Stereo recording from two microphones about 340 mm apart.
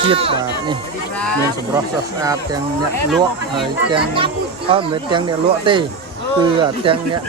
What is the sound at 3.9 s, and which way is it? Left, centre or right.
Speech, centre.